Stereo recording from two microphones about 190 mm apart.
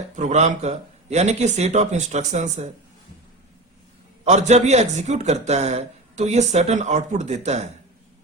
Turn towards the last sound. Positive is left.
turn(degrees=-35)  # may be behind; listen again after turning